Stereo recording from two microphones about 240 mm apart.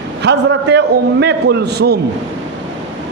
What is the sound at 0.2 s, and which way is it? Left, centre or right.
A man's voice, right.